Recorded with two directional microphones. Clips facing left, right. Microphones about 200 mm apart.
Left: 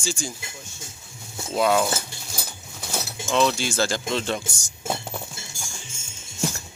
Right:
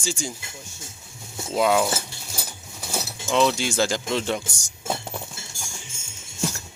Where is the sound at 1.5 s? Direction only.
10° right (ahead or behind).